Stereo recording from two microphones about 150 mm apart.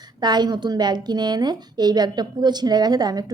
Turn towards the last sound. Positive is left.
turn(degrees=-25)  # may be behind; listen again after turning